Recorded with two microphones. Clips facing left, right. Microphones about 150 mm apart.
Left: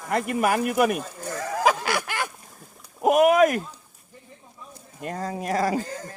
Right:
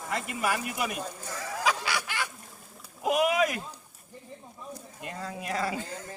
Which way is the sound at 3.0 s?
50° left (ahead or behind).